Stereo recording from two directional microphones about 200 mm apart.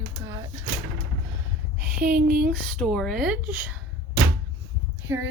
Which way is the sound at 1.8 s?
5° right (ahead or behind).